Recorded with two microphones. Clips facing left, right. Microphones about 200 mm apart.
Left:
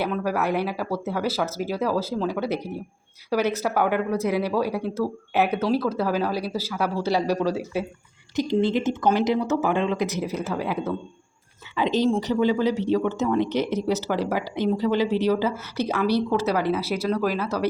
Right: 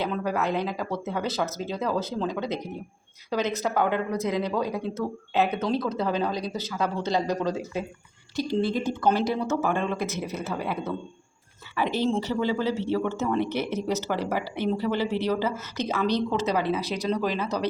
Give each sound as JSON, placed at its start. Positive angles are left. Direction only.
{"t": 0.0, "sound": "a woman's voice", "side_deg": 10}
{"t": 12.0, "sound": "speech", "side_deg": 15}